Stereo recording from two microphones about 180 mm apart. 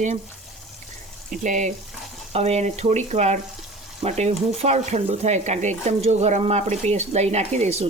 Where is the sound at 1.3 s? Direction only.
45° right (ahead or behind).